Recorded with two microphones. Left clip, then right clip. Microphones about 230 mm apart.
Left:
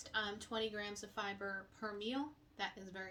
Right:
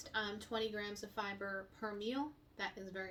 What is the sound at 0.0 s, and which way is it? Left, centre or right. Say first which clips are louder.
Speech: even; centre.